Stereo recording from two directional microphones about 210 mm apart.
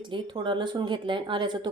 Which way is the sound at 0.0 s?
25° right (ahead or behind).